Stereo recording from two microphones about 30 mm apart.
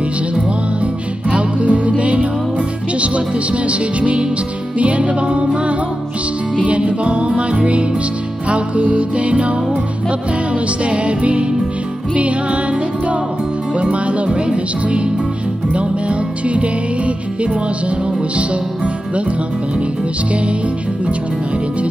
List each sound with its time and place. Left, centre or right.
1.3 s music: right
6.9 s music: right
13.7 s music: right